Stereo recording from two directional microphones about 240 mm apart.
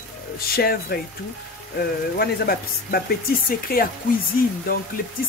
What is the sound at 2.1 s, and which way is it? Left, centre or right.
Speech, left.